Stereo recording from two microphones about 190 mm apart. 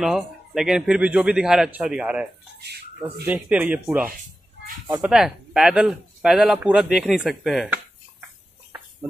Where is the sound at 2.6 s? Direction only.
60° right (ahead or behind).